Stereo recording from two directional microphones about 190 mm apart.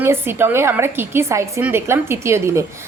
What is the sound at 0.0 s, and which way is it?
A woman's voice, 10° right (ahead or behind).